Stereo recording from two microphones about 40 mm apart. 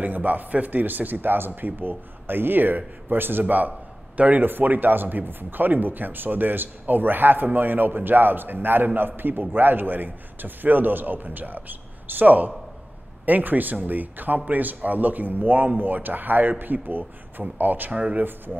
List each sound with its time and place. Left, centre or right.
0.0 s speech: right